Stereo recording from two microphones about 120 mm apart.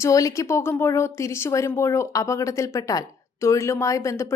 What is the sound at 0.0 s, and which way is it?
Speech, 30° left (ahead or behind).